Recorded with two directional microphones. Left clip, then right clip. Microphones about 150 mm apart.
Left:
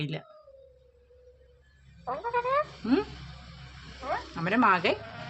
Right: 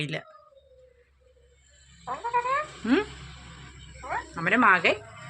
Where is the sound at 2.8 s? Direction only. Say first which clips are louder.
Right 3 dB; centre (ahead or behind).